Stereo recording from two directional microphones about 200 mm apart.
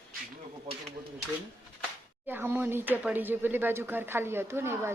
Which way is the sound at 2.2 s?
10° right (ahead or behind).